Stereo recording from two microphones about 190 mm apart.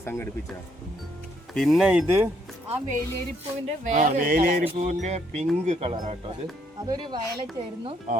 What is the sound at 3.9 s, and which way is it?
Speech, 40° right (ahead or behind).